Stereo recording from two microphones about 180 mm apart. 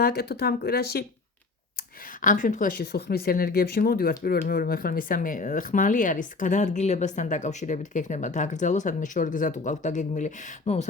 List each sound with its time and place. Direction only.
0.0 s speech: 60° left (ahead or behind)
2.2 s speech: 45° left (ahead or behind)